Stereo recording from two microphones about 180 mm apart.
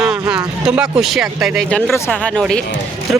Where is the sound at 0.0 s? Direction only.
5° right (ahead or behind).